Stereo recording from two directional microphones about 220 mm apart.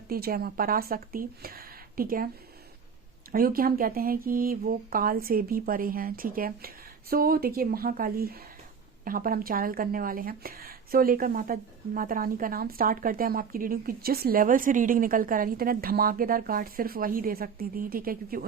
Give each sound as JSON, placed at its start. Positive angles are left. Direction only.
{"t": 0.1, "sound": "speech", "side_deg": -45}
{"t": 3.3, "sound": "a woman's voice", "side_deg": -40}